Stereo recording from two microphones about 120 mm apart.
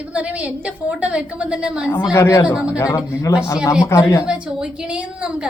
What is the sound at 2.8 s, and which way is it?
Speech, 25° left (ahead or behind).